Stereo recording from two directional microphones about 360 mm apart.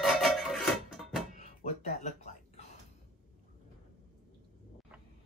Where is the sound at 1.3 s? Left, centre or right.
Left.